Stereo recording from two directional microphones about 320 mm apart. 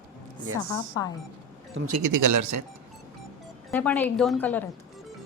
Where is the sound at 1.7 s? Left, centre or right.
Right.